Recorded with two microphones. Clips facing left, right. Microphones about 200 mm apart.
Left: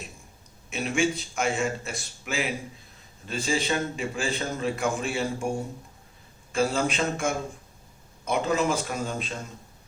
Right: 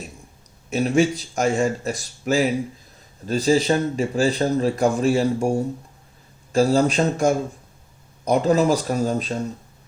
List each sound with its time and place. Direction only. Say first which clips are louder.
0.7 s a man's voice: right 7 dB; 40° right (ahead or behind)